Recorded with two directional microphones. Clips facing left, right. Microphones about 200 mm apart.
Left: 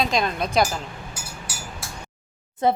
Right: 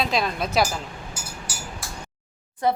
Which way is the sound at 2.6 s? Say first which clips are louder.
Left 2 dB; 20° left (ahead or behind).